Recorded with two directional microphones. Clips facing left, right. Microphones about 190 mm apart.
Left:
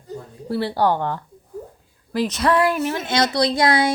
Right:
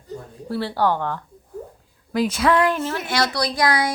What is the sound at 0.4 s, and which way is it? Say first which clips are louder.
Speech: left 2 dB; 15° left (ahead or behind).